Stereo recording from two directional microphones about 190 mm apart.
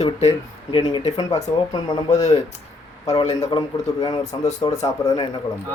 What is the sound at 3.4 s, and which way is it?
A man's voice, 20° left (ahead or behind).